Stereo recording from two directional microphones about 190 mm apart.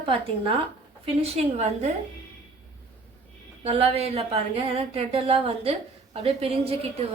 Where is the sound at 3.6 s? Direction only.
30° right (ahead or behind).